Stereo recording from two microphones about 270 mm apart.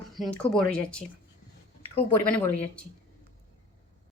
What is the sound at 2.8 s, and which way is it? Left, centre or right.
Speech, centre.